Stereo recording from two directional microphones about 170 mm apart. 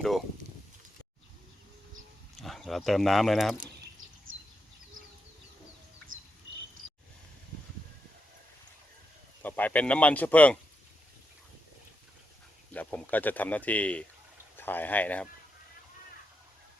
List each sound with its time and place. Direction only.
2.3 s speech: centre (ahead or behind)
9.4 s speech: 10° left (ahead or behind)
12.7 s speech: 10° left (ahead or behind)